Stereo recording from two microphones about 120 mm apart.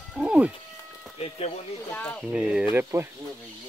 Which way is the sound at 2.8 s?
20° right (ahead or behind).